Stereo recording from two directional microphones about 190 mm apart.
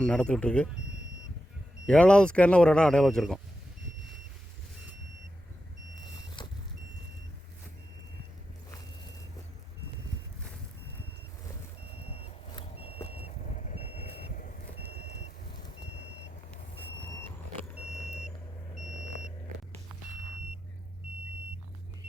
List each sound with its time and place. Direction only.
0.0 s speech: 5° left (ahead or behind)
1.9 s speech: 5° left (ahead or behind)
12.0 s vehicle: 30° left (ahead or behind)
17.7 s vehicle: 5° right (ahead or behind)